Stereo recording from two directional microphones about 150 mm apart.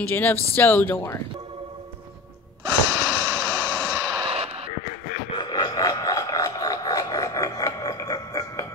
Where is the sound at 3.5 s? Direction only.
25° right (ahead or behind); by 4.6 s 40° right (ahead or behind).